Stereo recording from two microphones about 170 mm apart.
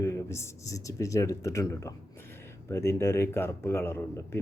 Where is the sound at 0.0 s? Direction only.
15° left (ahead or behind).